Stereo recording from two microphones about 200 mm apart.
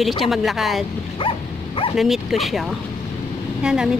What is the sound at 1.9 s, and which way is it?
Speech, centre (ahead or behind).